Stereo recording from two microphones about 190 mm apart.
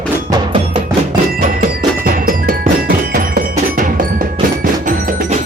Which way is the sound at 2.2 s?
50° right (ahead or behind).